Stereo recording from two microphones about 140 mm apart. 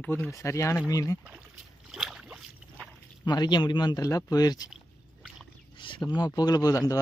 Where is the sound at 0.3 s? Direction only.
20° left (ahead or behind).